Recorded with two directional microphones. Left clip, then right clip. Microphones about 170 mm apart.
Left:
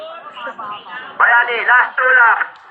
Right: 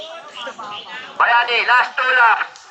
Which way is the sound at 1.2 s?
30° right (ahead or behind).